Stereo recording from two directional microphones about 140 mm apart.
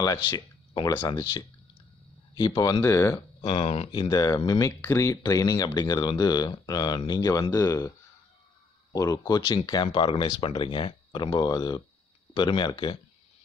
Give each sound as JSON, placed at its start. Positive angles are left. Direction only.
{"t": 0.0, "sound": "speech", "side_deg": 30}
{"t": 3.3, "sound": "speech", "side_deg": 40}
{"t": 8.9, "sound": "speech", "side_deg": 25}